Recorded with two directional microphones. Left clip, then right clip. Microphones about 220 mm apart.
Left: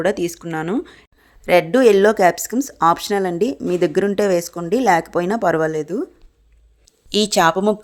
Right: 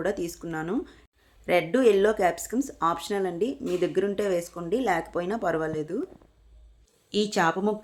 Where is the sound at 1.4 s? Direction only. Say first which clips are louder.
Left 9 dB; 45° left (ahead or behind).